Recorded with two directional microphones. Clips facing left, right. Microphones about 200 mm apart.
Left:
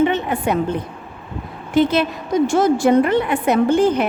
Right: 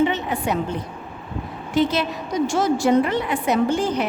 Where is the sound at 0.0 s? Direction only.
55° left (ahead or behind).